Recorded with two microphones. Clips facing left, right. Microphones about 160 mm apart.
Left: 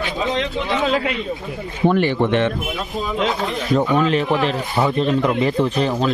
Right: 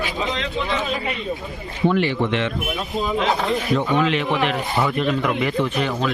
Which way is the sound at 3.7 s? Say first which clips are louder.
Left 5 dB; 40° left (ahead or behind).